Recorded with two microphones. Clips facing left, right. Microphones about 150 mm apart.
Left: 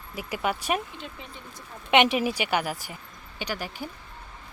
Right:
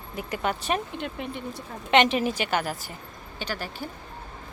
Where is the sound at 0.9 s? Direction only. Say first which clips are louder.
Right 8 dB; 65° right (ahead or behind).